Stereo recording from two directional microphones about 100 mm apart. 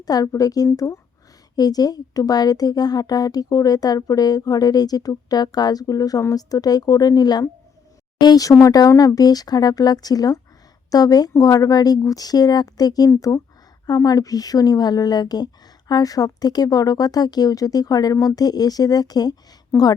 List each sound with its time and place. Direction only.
0.0 s speech: 40° left (ahead or behind)